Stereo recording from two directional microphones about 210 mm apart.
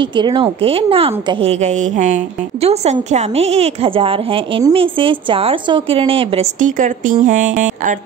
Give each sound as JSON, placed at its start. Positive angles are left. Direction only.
{"t": 0.0, "sound": "a woman's voice", "side_deg": -20}
{"t": 6.6, "sound": "speech", "side_deg": -35}